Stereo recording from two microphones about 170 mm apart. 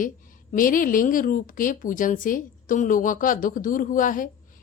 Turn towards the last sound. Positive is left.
turn(degrees=50)  # may be behind; listen again after turning